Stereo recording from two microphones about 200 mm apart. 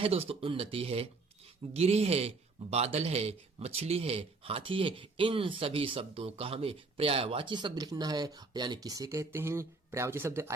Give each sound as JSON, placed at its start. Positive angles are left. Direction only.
{"t": 0.0, "sound": "a man's voice", "side_deg": -30}